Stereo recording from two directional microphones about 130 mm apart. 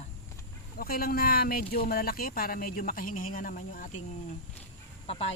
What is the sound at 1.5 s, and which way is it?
Speech, 90° left.